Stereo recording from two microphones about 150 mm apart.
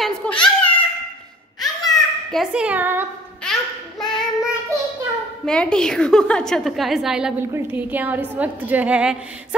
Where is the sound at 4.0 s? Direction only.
Centre (ahead or behind).